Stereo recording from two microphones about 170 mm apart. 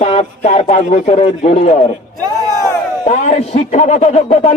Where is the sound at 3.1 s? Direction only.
40° left (ahead or behind).